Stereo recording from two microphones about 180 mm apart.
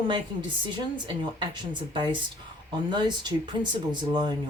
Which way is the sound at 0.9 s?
25° right (ahead or behind).